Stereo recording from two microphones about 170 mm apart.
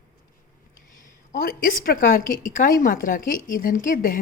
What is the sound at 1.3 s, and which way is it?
A woman's voice, 60° left (ahead or behind).